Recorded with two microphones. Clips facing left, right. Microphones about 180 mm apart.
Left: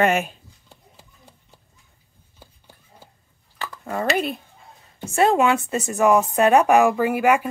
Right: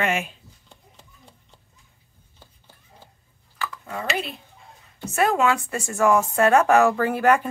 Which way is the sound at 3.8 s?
45° left (ahead or behind).